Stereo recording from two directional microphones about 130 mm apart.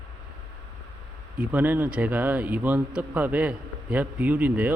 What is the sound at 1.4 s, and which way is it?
Speech, 10° right (ahead or behind).